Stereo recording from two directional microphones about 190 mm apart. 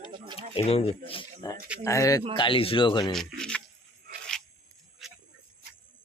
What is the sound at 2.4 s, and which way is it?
Speech, 25° left (ahead or behind).